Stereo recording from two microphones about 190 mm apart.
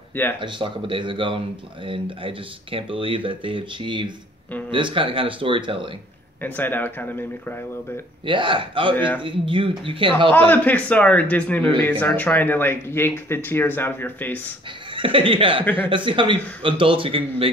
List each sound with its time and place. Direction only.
0.1 s speech: 10° left (ahead or behind)
0.4 s speech: 25° right (ahead or behind)
6.4 s speech: 10° left (ahead or behind)
8.3 s speech: 25° right (ahead or behind)
10.3 s speech: 10° left (ahead or behind)
15.0 s speech: 25° right (ahead or behind)